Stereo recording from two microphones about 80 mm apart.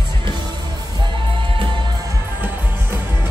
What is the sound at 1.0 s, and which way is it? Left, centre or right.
Music, right.